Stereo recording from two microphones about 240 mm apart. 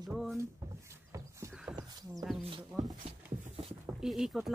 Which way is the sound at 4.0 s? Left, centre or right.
Centre.